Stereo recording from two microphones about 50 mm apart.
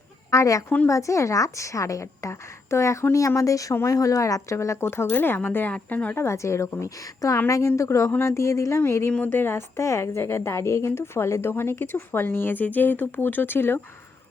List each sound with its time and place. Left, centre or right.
0.3 s a woman's voice: left
5.1 s a woman's voice: left
6.1 s a woman's voice: left
8.2 s speech: left
9.2 s a woman's voice: left
9.8 s a woman's voice: left